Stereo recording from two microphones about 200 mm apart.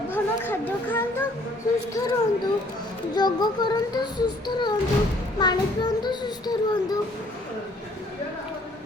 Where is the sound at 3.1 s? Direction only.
20° left (ahead or behind).